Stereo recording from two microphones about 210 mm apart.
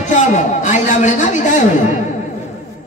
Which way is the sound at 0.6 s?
35° left (ahead or behind).